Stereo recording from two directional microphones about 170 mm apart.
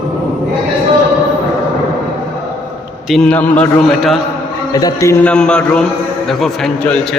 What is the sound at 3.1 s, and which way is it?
A man's voice, 5° left (ahead or behind).